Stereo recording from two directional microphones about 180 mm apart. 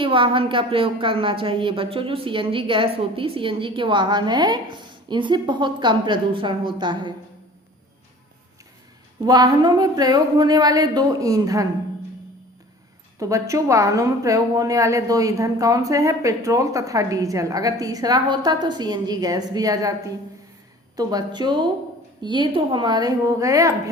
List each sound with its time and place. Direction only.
0.0 s a woman's voice: 30° right (ahead or behind)
9.2 s a woman's voice: 20° right (ahead or behind)
13.1 s a woman's voice: 20° right (ahead or behind)
20.9 s a woman's voice: 20° right (ahead or behind)